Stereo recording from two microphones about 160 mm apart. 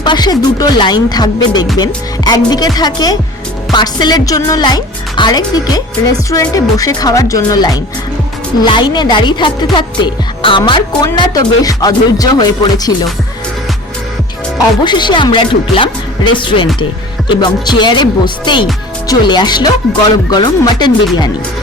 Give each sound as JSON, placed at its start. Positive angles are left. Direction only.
{"t": 0.0, "sound": "speech", "side_deg": 25}
{"t": 14.8, "sound": "speech", "side_deg": 30}